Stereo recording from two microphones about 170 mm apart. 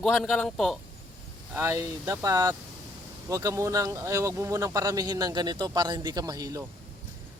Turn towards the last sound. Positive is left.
turn(degrees=-20)  # may be behind; listen again after turning